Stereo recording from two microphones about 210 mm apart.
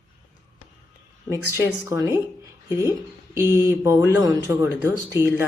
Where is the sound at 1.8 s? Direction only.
15° right (ahead or behind).